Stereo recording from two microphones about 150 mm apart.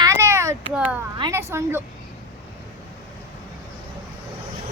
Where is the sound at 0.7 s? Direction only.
10° right (ahead or behind).